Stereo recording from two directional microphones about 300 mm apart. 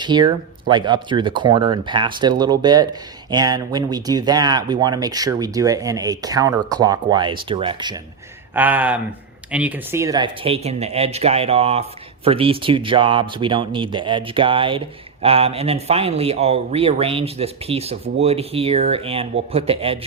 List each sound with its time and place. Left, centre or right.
0.0 s speech: centre